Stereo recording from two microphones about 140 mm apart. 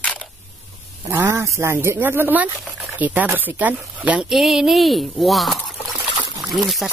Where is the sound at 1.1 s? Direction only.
15° right (ahead or behind).